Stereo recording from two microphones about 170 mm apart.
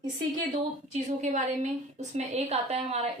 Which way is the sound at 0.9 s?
45° right (ahead or behind).